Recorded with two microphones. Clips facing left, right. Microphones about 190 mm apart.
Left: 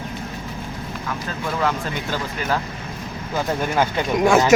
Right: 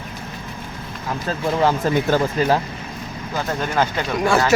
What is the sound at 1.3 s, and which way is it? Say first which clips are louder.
Speech: right 5 dB; 30° right (ahead or behind).